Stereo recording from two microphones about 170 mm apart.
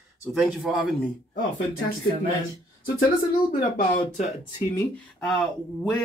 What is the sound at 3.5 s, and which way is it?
Speech, 35° left (ahead or behind).